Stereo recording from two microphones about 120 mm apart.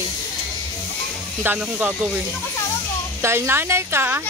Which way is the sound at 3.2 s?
20° right (ahead or behind).